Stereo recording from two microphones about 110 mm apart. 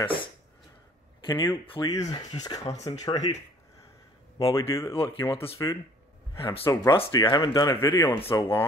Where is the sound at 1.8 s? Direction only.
35° left (ahead or behind).